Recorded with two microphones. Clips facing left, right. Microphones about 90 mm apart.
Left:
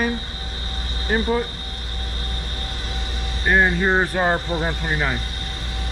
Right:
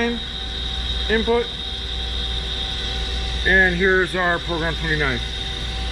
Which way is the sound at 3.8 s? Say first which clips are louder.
Right 1 dB; 20° left (ahead or behind).